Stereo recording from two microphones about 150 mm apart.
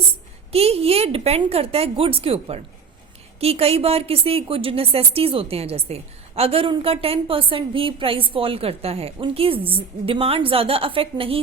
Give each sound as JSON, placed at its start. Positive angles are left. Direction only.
{"t": 0.5, "sound": "a woman's voice", "side_deg": -40}